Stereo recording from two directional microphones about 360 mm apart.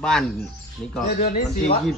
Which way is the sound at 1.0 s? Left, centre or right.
Left.